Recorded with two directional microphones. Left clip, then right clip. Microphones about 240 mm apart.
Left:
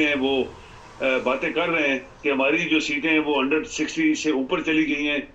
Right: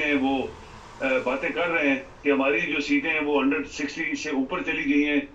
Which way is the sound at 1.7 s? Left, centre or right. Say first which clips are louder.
Left 1 dB; left.